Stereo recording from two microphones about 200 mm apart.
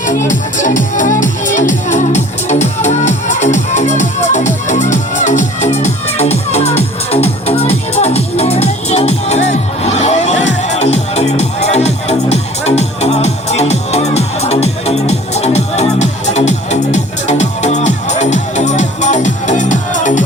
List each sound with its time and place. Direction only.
0.0 s music: 40° left (ahead or behind)